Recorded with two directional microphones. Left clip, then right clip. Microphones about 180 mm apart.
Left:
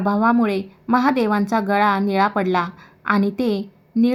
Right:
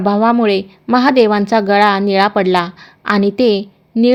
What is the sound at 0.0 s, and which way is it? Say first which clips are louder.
Speech: right 6 dB; 30° right (ahead or behind).